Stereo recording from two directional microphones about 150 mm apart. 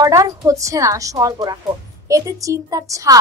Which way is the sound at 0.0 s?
25° right (ahead or behind).